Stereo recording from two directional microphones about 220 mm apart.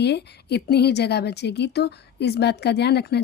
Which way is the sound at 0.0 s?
50° left (ahead or behind).